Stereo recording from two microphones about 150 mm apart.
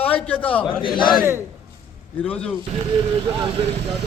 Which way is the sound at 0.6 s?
35° left (ahead or behind).